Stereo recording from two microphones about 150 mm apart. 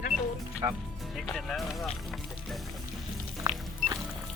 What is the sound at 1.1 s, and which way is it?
Speech, centre (ahead or behind).